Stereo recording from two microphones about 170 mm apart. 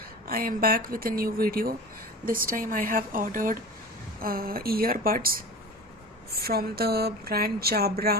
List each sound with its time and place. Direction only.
0.3 s a woman's voice: 60° right (ahead or behind)